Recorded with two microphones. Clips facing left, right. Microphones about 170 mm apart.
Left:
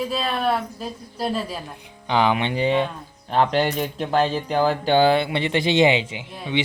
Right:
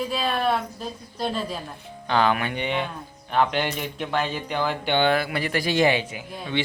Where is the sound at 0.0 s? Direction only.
Centre (ahead or behind).